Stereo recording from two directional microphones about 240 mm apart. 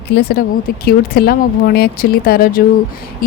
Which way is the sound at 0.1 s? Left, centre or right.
Left.